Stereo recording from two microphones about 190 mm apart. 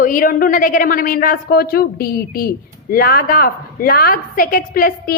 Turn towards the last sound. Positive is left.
turn(degrees=50)  # may be behind; listen again after turning